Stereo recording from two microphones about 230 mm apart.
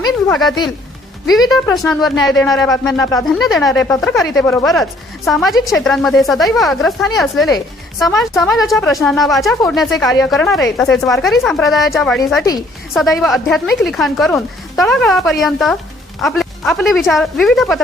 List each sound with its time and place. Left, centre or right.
0.4 s speech: centre
1.3 s speech: centre
2.6 s speech: centre
3.4 s speech: centre